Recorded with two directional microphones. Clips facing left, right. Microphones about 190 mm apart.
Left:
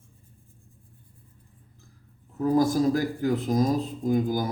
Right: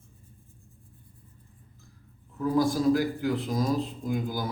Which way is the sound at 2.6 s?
45° left (ahead or behind).